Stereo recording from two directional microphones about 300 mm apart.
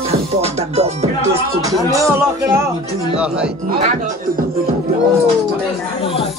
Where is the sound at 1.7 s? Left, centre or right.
Centre.